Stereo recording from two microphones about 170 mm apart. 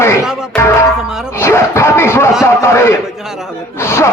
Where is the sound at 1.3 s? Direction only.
15° left (ahead or behind).